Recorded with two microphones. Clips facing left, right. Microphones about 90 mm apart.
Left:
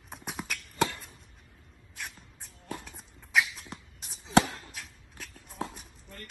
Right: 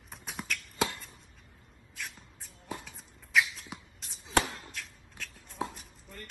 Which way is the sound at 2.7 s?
Centre (ahead or behind).